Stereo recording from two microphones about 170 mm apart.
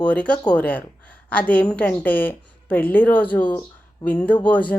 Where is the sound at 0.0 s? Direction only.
10° left (ahead or behind).